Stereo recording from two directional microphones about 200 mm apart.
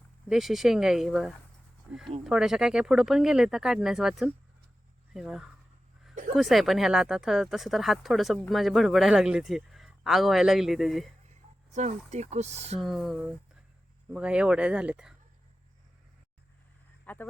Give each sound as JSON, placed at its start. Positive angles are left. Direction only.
{"t": 0.3, "sound": "speech", "side_deg": 0}
{"t": 11.7, "sound": "speech", "side_deg": -35}
{"t": 12.8, "sound": "speech", "side_deg": 0}
{"t": 17.1, "sound": "speech", "side_deg": 10}